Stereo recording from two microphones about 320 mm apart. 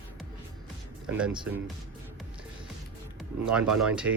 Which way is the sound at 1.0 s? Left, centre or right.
Centre.